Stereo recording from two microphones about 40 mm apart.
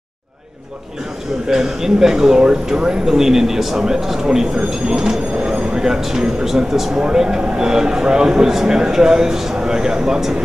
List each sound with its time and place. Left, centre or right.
1.5 s speech: centre
5.4 s speech: right
5.8 s speech: centre
7.0 s speech: centre